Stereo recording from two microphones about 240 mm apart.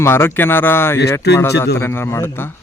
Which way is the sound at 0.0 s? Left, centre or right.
Centre.